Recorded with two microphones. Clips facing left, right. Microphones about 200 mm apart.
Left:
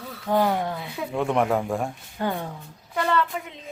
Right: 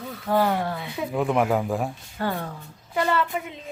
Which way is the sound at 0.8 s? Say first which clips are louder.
Right 1 dB; centre (ahead or behind).